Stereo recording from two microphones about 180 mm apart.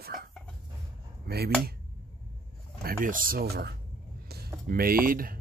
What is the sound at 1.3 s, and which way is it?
Speech, 60° right (ahead or behind).